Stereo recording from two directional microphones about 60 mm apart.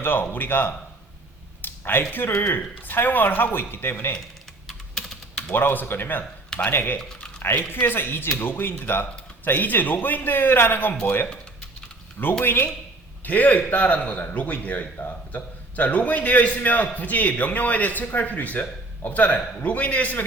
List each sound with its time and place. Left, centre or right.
0.0 s speech: left
2.6 s speech: left
4.7 s typing: centre
5.5 s speech: left
12.2 s a man's voice: left